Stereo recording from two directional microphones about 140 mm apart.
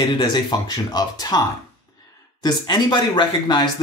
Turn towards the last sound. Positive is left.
turn(degrees=35)  # may be behind; listen again after turning